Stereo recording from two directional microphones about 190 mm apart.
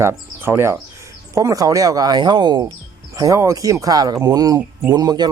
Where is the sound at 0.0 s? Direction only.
15° right (ahead or behind).